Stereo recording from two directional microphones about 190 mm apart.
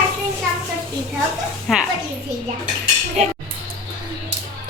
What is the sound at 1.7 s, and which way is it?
Speech, centre (ahead or behind).